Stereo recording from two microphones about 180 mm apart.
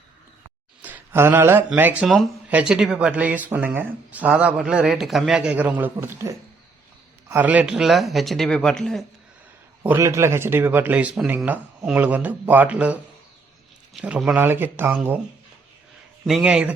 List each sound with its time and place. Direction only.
0.8 s speech: 10° right (ahead or behind)
9.8 s speech: 15° right (ahead or behind)
16.2 s speech: 5° right (ahead or behind)